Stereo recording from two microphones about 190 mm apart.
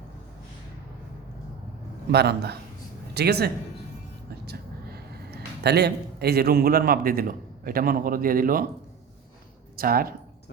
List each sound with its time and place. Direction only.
2.1 s speech: 60° right (ahead or behind)
9.7 s speech: 50° right (ahead or behind)